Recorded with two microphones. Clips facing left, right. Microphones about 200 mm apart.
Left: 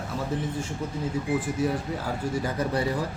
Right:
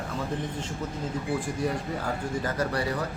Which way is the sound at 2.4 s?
20° left (ahead or behind).